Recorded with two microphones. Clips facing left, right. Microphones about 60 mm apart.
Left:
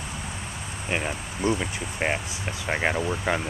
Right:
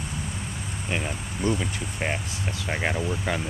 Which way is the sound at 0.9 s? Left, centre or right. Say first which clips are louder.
Left 2 dB; centre.